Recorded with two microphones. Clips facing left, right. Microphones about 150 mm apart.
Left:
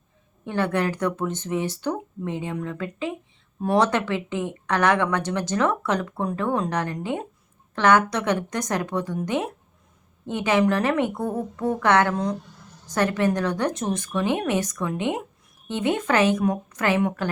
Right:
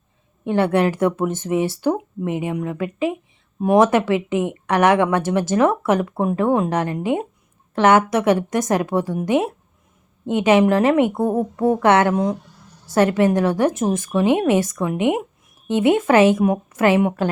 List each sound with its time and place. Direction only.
0.4 s a woman's voice: 20° right (ahead or behind)
14.3 s a woman's voice: 20° right (ahead or behind)